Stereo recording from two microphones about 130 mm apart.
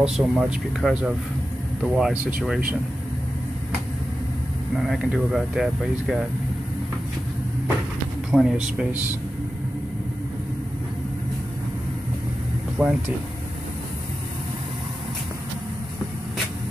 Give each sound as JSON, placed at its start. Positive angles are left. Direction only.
{"t": 0.0, "sound": "speech", "side_deg": -5}
{"t": 4.7, "sound": "speech", "side_deg": -5}
{"t": 8.3, "sound": "speech", "side_deg": -5}
{"t": 12.8, "sound": "speech", "side_deg": -5}